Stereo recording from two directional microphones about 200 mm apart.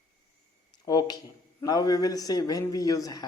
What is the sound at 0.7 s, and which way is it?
Speech, 20° left (ahead or behind).